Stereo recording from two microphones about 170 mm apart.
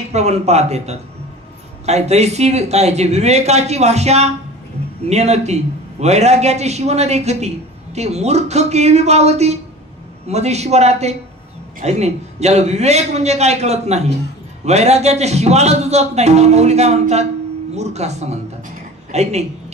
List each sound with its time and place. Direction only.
0.1 s a man's voice: 40° right (ahead or behind)